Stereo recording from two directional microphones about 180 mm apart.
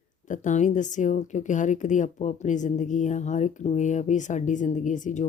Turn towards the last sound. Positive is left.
turn(degrees=45)  # may be behind; listen again after turning